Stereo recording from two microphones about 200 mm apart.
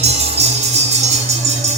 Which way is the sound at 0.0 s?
30° right (ahead or behind).